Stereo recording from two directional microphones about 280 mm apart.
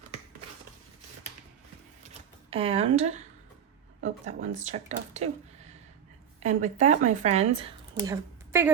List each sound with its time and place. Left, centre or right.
2.0 s typewriter: right
4.4 s a woman's voice: right
6.4 s a woman's voice: right
7.9 s a woman's voice: centre